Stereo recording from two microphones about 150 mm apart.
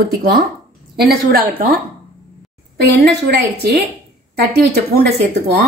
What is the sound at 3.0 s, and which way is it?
A woman's voice, 90° right.